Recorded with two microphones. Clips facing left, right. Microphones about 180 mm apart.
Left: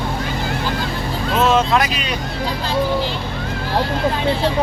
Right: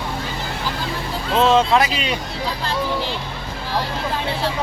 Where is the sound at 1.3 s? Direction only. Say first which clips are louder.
Right 1 dB; 25° right (ahead or behind).